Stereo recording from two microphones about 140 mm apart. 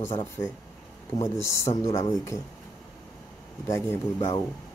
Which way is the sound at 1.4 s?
20° left (ahead or behind).